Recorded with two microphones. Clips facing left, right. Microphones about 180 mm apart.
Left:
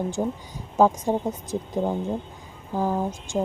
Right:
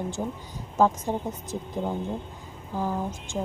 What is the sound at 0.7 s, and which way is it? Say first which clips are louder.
Speech: left 3 dB; 15° left (ahead or behind).